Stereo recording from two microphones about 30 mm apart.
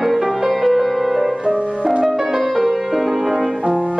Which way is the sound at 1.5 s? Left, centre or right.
Right.